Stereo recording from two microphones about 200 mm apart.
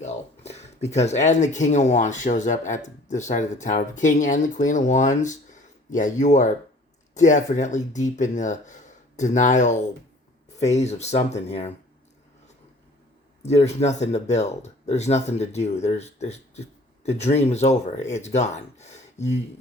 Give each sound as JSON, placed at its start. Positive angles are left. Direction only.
{"t": 0.0, "sound": "a sound", "side_deg": 35}
{"t": 0.9, "sound": "speech", "side_deg": 35}
{"t": 13.4, "sound": "speech", "side_deg": 35}